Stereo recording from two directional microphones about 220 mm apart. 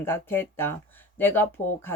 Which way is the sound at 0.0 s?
10° left (ahead or behind).